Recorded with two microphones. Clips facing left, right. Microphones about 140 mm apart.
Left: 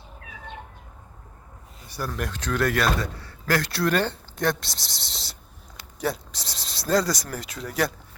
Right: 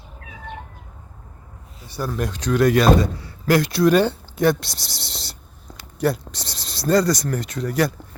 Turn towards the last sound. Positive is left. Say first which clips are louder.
# right 5 dB
turn(degrees=0)  # may be behind; listen again after turning